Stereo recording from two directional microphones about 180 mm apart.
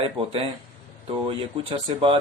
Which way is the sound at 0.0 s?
30° right (ahead or behind).